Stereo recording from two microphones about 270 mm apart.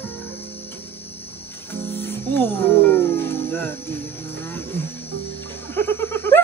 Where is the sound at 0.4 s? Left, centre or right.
Left.